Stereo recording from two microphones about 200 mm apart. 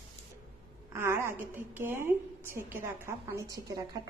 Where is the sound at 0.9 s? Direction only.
10° right (ahead or behind).